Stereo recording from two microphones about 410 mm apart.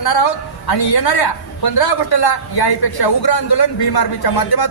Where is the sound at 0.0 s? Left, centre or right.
Left.